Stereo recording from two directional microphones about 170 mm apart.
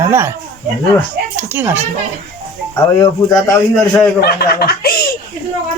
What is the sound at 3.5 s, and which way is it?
Speech, 15° left (ahead or behind).